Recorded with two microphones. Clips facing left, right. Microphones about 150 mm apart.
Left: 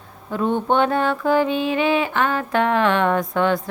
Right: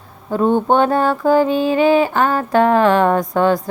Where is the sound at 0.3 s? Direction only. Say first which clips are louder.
Right 5 dB; 40° right (ahead or behind).